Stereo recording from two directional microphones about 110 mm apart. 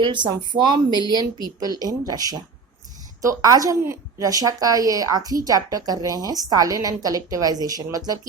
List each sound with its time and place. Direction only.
0.0 s a woman's voice: 45° right (ahead or behind)